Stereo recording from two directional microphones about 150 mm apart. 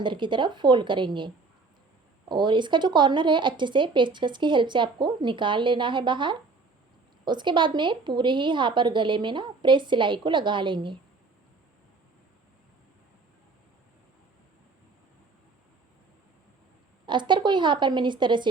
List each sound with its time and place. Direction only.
0.0 s speech: 30° right (ahead or behind)
2.3 s speech: 30° right (ahead or behind)
17.1 s speech: 30° right (ahead or behind)